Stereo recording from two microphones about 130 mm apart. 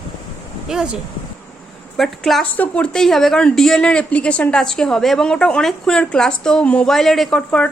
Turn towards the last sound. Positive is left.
turn(degrees=10)  # may be behind; listen again after turning